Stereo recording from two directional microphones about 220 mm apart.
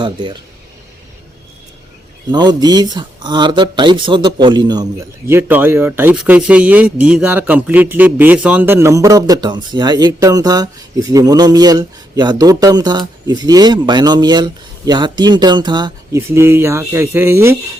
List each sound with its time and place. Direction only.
0.0 s speech: 20° right (ahead or behind)
2.3 s speech: 20° right (ahead or behind)
5.3 s speech: 10° right (ahead or behind)